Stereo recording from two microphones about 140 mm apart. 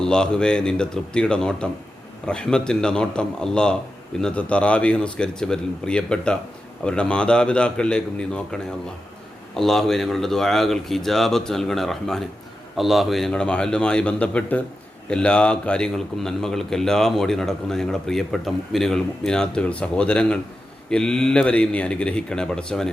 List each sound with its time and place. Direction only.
0.0 s speech: 5° left (ahead or behind)